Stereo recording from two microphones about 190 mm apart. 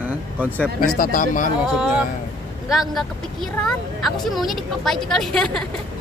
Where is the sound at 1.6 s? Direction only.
5° right (ahead or behind).